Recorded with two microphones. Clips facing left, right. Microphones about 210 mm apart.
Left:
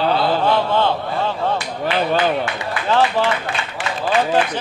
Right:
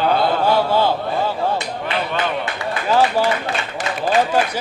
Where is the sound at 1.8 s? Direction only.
35° left (ahead or behind).